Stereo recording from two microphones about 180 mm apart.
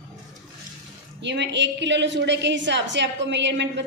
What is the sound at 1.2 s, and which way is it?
A woman's voice, 75° right (ahead or behind).